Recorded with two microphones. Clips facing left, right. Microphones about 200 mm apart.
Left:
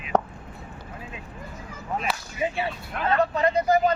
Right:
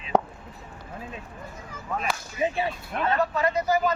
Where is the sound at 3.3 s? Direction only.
30° left (ahead or behind).